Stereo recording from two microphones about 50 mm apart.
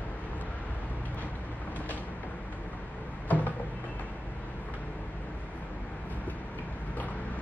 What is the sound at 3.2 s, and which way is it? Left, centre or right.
Cupboard open or close, left.